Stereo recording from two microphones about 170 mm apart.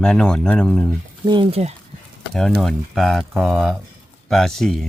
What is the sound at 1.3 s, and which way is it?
Speech, 30° right (ahead or behind).